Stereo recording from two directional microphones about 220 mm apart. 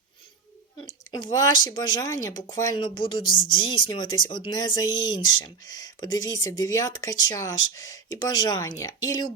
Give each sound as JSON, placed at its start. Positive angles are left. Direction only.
{"t": 0.8, "sound": "speech", "side_deg": 20}